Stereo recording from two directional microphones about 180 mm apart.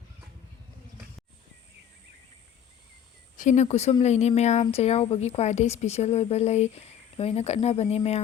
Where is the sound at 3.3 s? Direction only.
45° left (ahead or behind).